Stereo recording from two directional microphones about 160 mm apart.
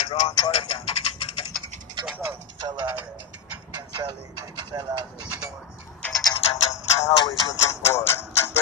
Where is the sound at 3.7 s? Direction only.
25° right (ahead or behind).